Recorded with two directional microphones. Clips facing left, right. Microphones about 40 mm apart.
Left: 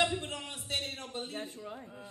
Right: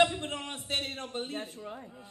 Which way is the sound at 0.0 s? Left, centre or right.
Right.